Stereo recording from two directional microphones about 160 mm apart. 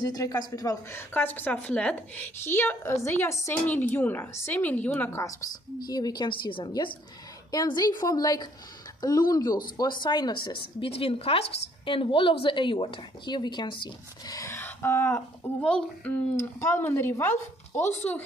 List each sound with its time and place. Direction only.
0.0 s a woman's voice: 20° left (ahead or behind)